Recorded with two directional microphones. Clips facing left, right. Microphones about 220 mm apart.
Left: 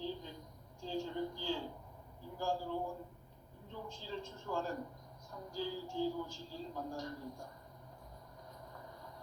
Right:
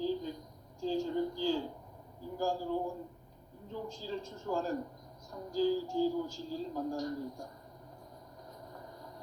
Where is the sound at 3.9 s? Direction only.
40° right (ahead or behind).